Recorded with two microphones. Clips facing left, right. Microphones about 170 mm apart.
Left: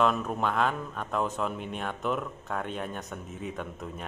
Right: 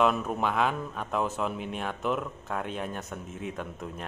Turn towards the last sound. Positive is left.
turn(degrees=0)  # may be behind; listen again after turning